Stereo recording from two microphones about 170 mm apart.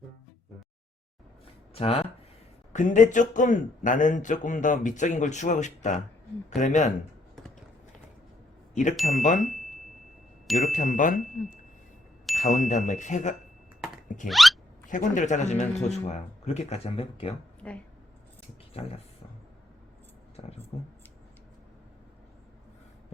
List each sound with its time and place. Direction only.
1.7 s speech: 35° left (ahead or behind)
2.7 s speech: 50° left (ahead or behind)
9.0 s speech: 50° left (ahead or behind)
9.5 s a sound: centre (ahead or behind)
10.6 s speech: 50° left (ahead or behind)
14.3 s hiccup: centre (ahead or behind)
14.8 s a man's voice: 50° left (ahead or behind)
17.6 s speech: 10° left (ahead or behind)
18.8 s a man's voice: 35° left (ahead or behind)
20.4 s speech: 35° left (ahead or behind)